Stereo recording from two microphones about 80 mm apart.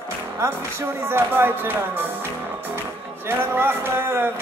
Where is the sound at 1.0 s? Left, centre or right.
Right.